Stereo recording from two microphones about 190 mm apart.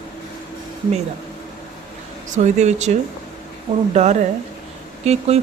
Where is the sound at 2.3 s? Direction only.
40° right (ahead or behind).